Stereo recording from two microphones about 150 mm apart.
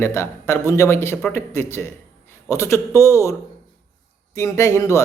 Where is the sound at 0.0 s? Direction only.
20° left (ahead or behind).